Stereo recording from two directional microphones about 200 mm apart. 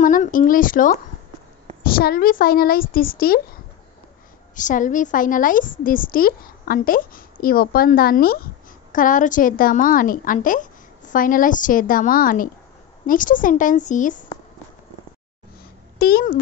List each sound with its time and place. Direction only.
0.0 s a woman's voice: 40° left (ahead or behind)
4.6 s a woman's voice: 40° left (ahead or behind)
16.0 s a woman's voice: 50° left (ahead or behind)